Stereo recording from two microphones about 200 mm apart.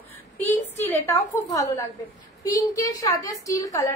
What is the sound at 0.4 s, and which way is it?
A woman's voice, 10° left (ahead or behind).